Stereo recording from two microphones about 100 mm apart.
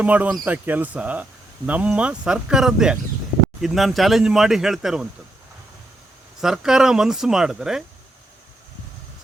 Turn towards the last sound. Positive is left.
turn(degrees=-5)  # may be behind; listen again after turning